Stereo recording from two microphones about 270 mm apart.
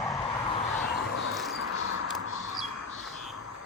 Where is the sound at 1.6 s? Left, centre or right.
Left.